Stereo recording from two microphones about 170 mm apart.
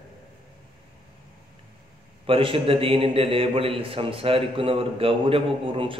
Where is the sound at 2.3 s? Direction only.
30° right (ahead or behind).